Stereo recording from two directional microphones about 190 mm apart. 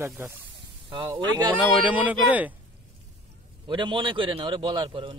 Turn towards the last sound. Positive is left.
turn(degrees=-25)  # may be behind; listen again after turning